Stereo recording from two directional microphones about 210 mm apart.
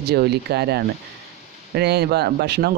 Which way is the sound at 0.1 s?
50° right (ahead or behind).